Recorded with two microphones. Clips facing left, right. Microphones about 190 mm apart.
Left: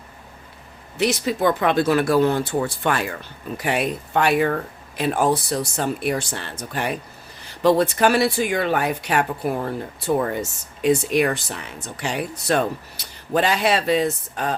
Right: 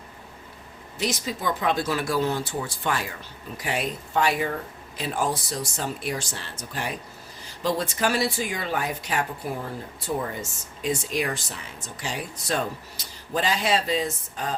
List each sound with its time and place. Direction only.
0.9 s speech: 65° left (ahead or behind)